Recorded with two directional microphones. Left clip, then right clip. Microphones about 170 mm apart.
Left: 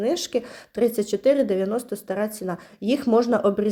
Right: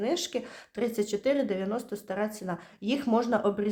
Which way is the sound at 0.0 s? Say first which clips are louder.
Left 6 dB; 25° left (ahead or behind).